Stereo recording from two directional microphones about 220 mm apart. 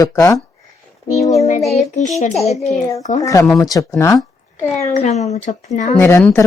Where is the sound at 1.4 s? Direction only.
35° left (ahead or behind).